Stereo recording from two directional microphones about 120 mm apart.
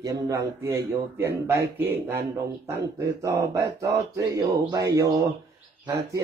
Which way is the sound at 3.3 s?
30° right (ahead or behind).